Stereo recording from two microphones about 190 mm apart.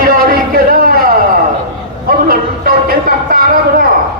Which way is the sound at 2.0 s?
50° right (ahead or behind).